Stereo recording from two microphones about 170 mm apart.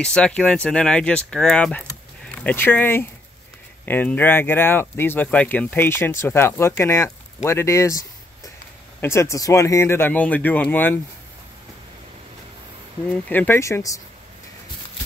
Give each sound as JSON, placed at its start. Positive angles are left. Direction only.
{"t": 0.0, "sound": "speech", "side_deg": 5}
{"t": 9.0, "sound": "speech", "side_deg": 15}
{"t": 13.1, "sound": "speech", "side_deg": 10}